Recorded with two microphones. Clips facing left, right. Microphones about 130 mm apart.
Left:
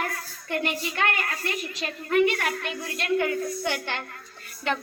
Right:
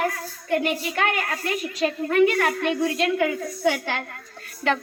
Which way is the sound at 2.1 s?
90° right.